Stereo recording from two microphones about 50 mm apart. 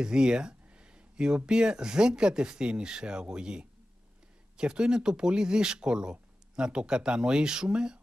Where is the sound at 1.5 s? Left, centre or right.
Centre.